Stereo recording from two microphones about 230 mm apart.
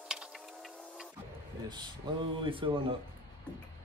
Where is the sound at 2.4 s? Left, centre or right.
Right.